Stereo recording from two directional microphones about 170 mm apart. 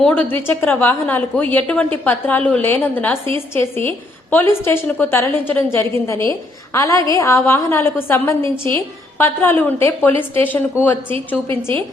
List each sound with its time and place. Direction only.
0.0 s a woman's voice: 10° left (ahead or behind)